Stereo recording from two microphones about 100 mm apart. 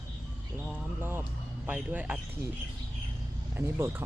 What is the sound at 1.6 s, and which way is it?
Speech, 15° right (ahead or behind).